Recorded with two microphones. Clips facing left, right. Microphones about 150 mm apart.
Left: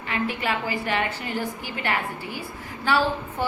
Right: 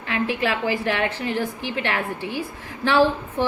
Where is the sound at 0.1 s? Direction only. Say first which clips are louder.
Right 3 dB; 90° right.